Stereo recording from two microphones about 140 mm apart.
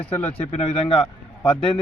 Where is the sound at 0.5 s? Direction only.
50° left (ahead or behind).